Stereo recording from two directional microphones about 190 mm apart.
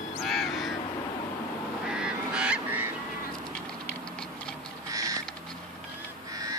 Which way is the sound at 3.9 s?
5° left (ahead or behind).